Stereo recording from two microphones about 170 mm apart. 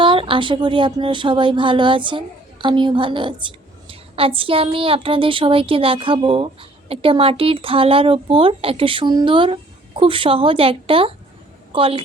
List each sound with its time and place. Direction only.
0.0 s speech: 30° right (ahead or behind)